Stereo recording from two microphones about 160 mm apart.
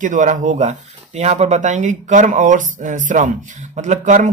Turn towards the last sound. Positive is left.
turn(degrees=-50)  # may be behind; listen again after turning